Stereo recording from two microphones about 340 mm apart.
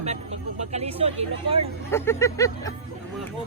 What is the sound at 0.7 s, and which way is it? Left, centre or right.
Speech, centre.